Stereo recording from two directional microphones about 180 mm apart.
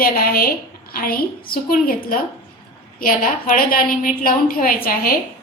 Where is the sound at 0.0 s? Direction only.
55° left (ahead or behind).